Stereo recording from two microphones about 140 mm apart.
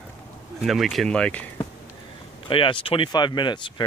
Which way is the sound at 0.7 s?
Centre (ahead or behind).